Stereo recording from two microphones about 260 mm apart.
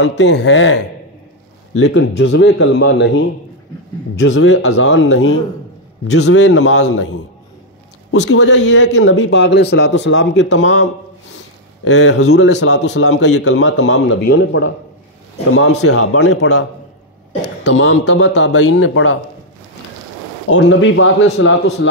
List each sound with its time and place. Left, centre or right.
0.0 s speech: left
6.2 s speech: left
8.1 s speech: left
13.0 s a man's voice: left
13.4 s speech: left
15.9 s a man's voice: left
17.6 s speech: left
20.4 s speech: left